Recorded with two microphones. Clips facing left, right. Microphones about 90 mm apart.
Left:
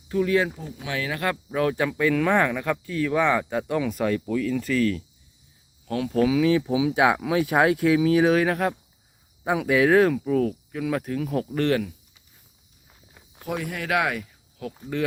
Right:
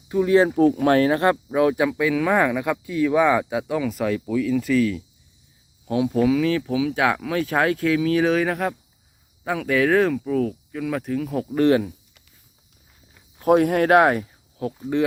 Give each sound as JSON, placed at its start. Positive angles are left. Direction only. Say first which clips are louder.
{"t": 0.1, "sound": "speech", "louder": "right 3 dB", "side_deg": -20}
{"t": 0.5, "sound": "speech", "louder": "right 16 dB", "side_deg": -55}
{"t": 1.5, "sound": "speech", "louder": "right 4 dB", "side_deg": -15}
{"t": 5.8, "sound": "speech", "louder": "right 3 dB", "side_deg": -15}
{"t": 6.5, "sound": "speech", "louder": "left 1 dB", "side_deg": 15}
{"t": 9.4, "sound": "speech", "louder": "even", "side_deg": 15}
{"t": 11.5, "sound": "speech", "louder": "right 7 dB", "side_deg": -20}
{"t": 13.4, "sound": "speech", "louder": "right 13 dB", "side_deg": -50}